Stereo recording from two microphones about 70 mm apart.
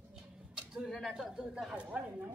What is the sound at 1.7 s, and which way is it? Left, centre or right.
Speech, centre.